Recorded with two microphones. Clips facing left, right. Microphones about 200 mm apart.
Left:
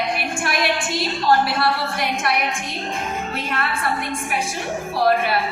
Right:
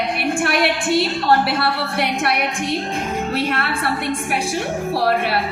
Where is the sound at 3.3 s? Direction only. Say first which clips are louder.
Right 6 dB; 65° right (ahead or behind).